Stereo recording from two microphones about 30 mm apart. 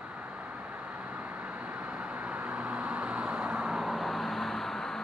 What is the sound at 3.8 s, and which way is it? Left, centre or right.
Vehicle, centre.